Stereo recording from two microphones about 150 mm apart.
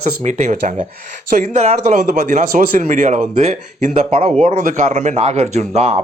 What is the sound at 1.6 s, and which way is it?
Speech, 50° right (ahead or behind).